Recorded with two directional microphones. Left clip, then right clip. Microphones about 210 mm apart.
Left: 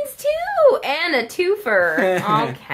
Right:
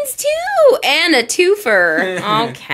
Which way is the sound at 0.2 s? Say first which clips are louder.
Right 4 dB; 45° right (ahead or behind).